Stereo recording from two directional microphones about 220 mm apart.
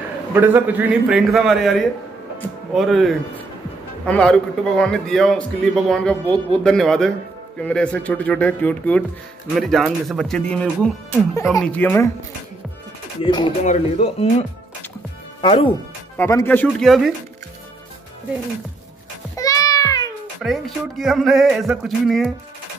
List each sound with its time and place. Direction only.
0.3 s a man's voice: 10° right (ahead or behind); by 12.1 s 10° left (ahead or behind)
13.2 s speech: 20° left (ahead or behind)
15.4 s speech: 25° left (ahead or behind)
16.2 s speech: 10° left (ahead or behind)
19.3 s music: 15° left (ahead or behind)
20.4 s a man's voice: centre (ahead or behind)